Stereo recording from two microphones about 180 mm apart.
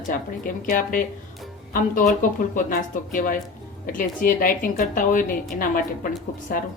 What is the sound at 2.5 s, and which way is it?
A woman's voice, 50° left (ahead or behind).